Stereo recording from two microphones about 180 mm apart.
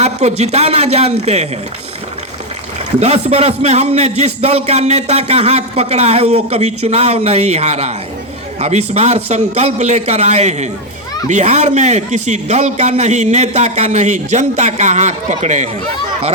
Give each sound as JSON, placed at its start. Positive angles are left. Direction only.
{"t": 0.0, "sound": "a man's voice", "side_deg": -35}
{"t": 3.0, "sound": "a man's voice", "side_deg": -35}